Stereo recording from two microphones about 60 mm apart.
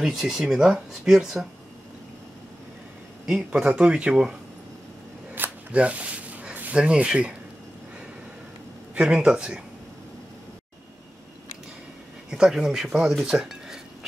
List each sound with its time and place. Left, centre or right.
0.0 s speech: centre
3.3 s speech: centre
5.3 s a sound: right
5.8 s speech: right
8.9 s speech: centre
12.3 s speech: centre